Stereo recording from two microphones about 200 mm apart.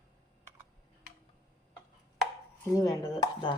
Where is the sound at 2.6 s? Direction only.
15° left (ahead or behind).